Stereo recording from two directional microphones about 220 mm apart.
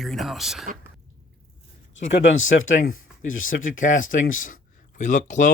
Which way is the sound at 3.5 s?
35° left (ahead or behind).